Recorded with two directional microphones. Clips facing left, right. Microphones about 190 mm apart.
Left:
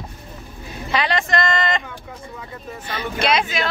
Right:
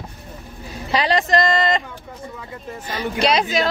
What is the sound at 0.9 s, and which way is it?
Speech, 35° right (ahead or behind).